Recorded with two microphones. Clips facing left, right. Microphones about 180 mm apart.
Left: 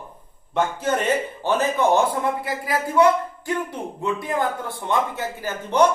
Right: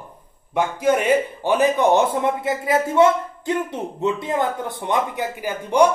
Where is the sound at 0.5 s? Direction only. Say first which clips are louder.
Right 3 dB; 10° right (ahead or behind).